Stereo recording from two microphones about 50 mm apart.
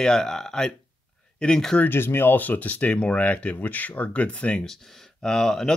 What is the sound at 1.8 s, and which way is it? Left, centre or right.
Speech, left.